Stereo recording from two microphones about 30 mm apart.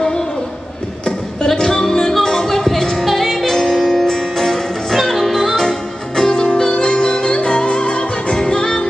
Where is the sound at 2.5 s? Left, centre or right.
Centre.